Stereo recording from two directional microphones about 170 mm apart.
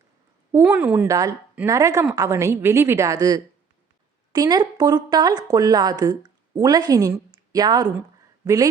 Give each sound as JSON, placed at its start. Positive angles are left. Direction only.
{"t": 0.6, "sound": "a woman's voice", "side_deg": -10}